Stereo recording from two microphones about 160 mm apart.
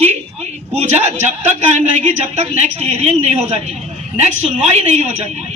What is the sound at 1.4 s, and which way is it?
A woman's voice, 50° right (ahead or behind).